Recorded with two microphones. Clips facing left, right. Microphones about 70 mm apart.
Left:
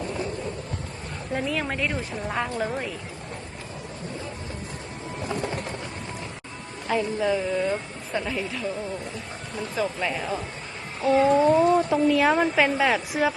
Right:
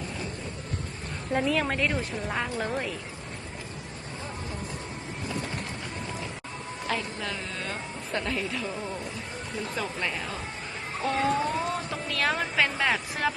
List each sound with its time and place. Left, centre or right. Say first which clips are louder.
1.3 s speech: right 2 dB; centre
5.3 s thunder: left 5 dB; left
6.9 s speech: left 10 dB; centre
9.7 s speech: left 7 dB; centre
11.0 s a sound: left 8 dB; centre
11.9 s speech: left 9 dB; centre
12.7 s speech: left 5 dB; centre